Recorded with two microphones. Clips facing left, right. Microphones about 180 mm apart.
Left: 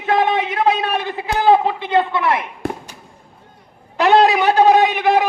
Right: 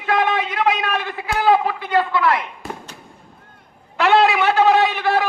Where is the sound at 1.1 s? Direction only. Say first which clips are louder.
Left 3 dB; 20° left (ahead or behind).